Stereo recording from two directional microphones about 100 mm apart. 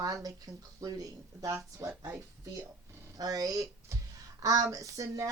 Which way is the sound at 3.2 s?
35° right (ahead or behind).